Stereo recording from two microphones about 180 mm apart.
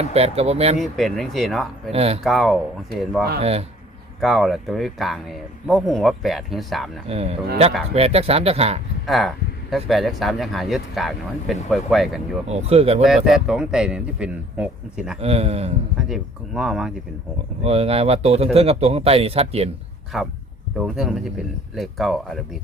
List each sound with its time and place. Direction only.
0.0 s speech: 35° right (ahead or behind)
0.8 s speech: centre (ahead or behind)
1.9 s speech: 35° right (ahead or behind)
2.2 s speech: centre (ahead or behind)
3.4 s speech: 35° right (ahead or behind)
4.2 s speech: centre (ahead or behind)
7.1 s speech: 35° right (ahead or behind)
9.0 s speech: centre (ahead or behind)
12.5 s speech: 35° right (ahead or behind)
13.0 s speech: centre (ahead or behind)
15.2 s speech: 35° right (ahead or behind)
16.0 s speech: centre (ahead or behind)
17.6 s speech: 35° right (ahead or behind)
20.1 s speech: centre (ahead or behind)